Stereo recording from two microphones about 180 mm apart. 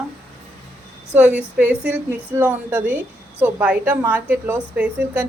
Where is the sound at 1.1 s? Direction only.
10° right (ahead or behind).